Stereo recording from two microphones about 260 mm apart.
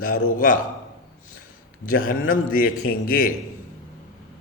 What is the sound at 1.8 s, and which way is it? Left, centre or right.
A man's voice, left.